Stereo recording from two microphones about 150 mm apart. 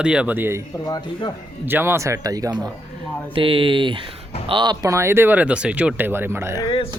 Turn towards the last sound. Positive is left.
turn(degrees=-15)  # may be behind; listen again after turning